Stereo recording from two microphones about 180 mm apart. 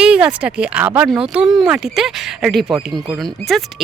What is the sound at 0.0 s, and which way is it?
Speech, 5° right (ahead or behind).